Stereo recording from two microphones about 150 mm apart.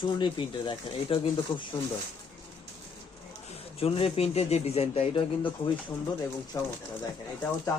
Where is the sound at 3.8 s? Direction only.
40° left (ahead or behind).